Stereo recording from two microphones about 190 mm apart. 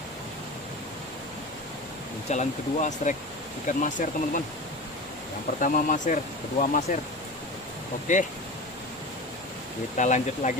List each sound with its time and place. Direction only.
2.3 s speech: 40° left (ahead or behind)
5.5 s speech: 45° left (ahead or behind)
8.1 s speech: 40° left (ahead or behind)
10.0 s speech: 40° left (ahead or behind)